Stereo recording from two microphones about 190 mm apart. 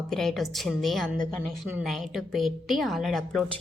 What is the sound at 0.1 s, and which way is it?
A woman's voice, centre (ahead or behind).